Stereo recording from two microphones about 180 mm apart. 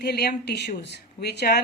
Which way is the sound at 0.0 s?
65° left (ahead or behind).